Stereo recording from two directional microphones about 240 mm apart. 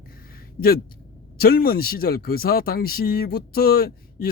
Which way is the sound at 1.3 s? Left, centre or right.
Left.